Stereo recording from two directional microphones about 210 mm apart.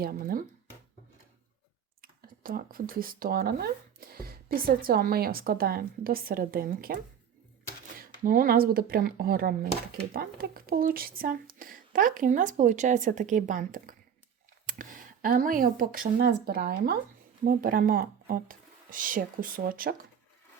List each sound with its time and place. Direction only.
0.0 s speech: 45° right (ahead or behind)
2.0 s speech: 45° right (ahead or behind)